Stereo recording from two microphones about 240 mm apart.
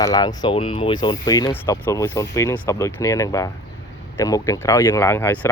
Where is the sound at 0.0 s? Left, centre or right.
Centre.